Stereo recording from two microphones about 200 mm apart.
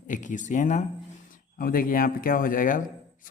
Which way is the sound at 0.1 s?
40° left (ahead or behind).